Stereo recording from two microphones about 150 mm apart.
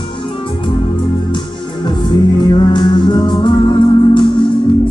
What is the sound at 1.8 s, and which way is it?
Music, 30° left (ahead or behind).